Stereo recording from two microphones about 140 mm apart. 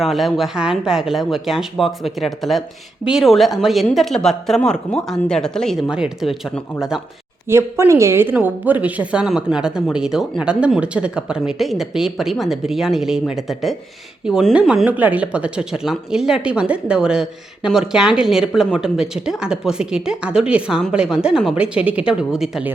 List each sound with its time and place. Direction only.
0.0 s speech: centre (ahead or behind)
7.4 s speech: 20° right (ahead or behind)